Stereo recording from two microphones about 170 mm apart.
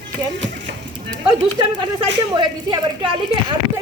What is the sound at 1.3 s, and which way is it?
A woman's voice, 25° right (ahead or behind).